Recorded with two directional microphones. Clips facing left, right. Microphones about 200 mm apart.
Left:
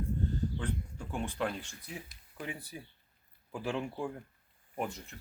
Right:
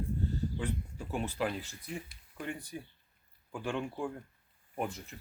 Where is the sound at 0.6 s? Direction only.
5° right (ahead or behind).